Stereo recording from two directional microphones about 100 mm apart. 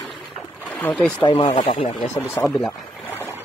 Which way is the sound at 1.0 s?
5° left (ahead or behind).